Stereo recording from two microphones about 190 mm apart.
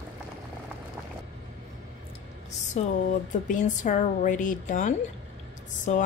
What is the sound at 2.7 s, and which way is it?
Speech, 40° left (ahead or behind).